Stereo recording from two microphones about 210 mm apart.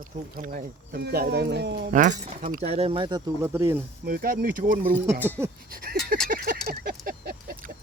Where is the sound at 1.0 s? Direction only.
50° right (ahead or behind).